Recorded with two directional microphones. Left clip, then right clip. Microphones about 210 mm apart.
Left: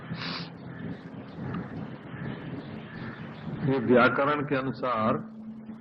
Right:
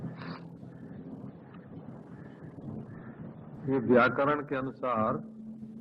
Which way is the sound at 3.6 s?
30° left (ahead or behind).